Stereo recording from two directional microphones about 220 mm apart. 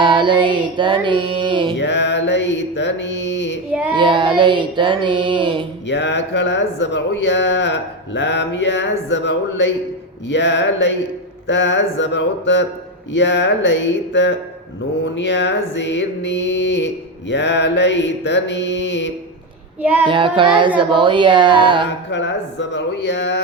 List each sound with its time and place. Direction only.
0.0 s speech: 20° right (ahead or behind)
1.8 s speech: 55° left (ahead or behind)
3.9 s speech: 20° right (ahead or behind)
5.9 s speech: 55° left (ahead or behind)
20.1 s speech: 20° right (ahead or behind)
22.1 s speech: 55° left (ahead or behind)